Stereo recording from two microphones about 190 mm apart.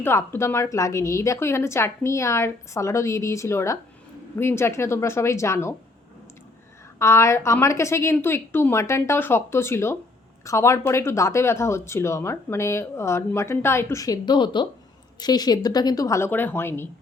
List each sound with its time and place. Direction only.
0.0 s speech: 10° left (ahead or behind)
7.0 s speech: 15° left (ahead or behind)